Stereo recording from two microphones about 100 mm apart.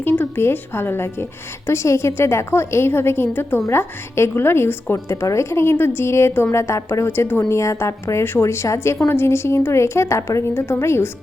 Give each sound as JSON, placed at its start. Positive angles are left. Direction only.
{"t": 0.0, "sound": "a woman's voice", "side_deg": 20}